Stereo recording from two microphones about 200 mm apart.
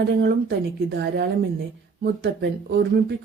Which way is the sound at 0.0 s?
55° right (ahead or behind).